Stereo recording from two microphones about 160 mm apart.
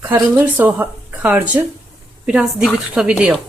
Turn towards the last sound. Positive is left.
turn(degrees=-5)  # may be behind; listen again after turning